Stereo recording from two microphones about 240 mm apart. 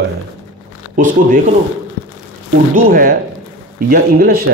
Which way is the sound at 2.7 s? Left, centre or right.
Right.